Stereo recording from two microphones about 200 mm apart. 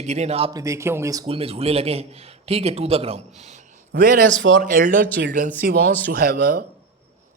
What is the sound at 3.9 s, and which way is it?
A man's voice, 50° right (ahead or behind).